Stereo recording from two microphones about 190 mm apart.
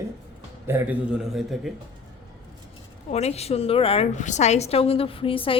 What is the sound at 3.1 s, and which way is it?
A woman's voice, 35° left (ahead or behind).